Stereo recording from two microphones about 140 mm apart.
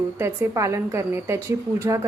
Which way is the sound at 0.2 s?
20° right (ahead or behind).